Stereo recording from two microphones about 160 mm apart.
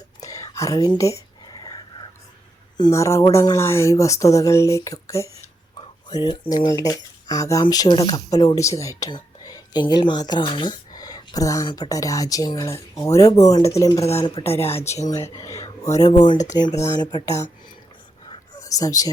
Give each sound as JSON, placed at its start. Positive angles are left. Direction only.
{"t": 0.2, "sound": "whispering", "side_deg": 20}
{"t": 2.7, "sound": "speech", "side_deg": 20}
{"t": 14.0, "sound": "speech", "side_deg": 40}
{"t": 14.8, "sound": "speech", "side_deg": 20}
{"t": 18.6, "sound": "speech", "side_deg": 20}